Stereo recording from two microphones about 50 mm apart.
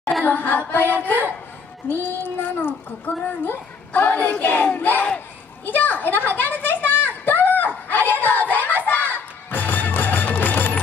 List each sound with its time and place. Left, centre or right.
0.2 s a child's voice: left
1.9 s child singing: left
3.1 s a child's voice: left
5.7 s a sound: left